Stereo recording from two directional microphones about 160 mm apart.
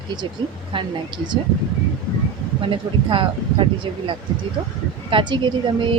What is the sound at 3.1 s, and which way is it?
Speech, 30° right (ahead or behind).